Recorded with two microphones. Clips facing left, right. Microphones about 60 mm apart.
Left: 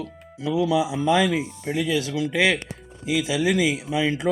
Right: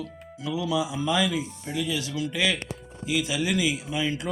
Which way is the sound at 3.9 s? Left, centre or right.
Left.